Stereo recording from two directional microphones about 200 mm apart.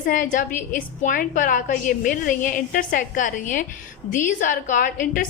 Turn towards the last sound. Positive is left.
turn(degrees=45)  # may be behind; listen again after turning